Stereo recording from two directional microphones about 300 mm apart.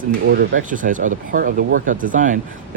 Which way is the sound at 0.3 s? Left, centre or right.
Right.